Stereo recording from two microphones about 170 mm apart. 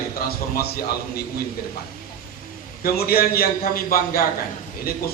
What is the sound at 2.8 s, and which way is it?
A man's voice, 65° left (ahead or behind).